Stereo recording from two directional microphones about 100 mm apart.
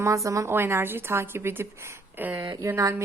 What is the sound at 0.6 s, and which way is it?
A woman's voice, 20° right (ahead or behind).